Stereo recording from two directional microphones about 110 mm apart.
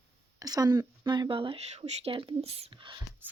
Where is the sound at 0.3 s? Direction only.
35° right (ahead or behind); by 3.0 s 50° right (ahead or behind).